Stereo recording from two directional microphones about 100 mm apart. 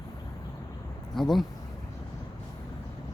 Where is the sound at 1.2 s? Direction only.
5° left (ahead or behind).